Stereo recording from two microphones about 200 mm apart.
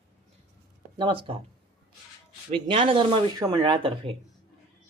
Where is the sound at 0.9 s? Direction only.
25° right (ahead or behind).